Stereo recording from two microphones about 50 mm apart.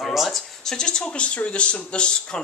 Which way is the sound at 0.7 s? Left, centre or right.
Centre.